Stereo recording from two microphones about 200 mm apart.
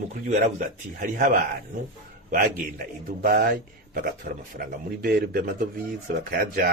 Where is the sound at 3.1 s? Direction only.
45° right (ahead or behind).